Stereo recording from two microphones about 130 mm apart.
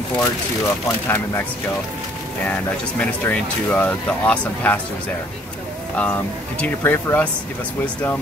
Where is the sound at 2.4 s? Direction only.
10° left (ahead or behind).